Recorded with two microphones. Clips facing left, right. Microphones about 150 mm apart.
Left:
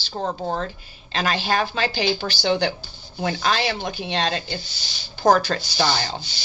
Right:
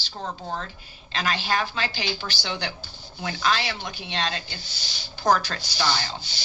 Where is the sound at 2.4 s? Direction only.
45° left (ahead or behind).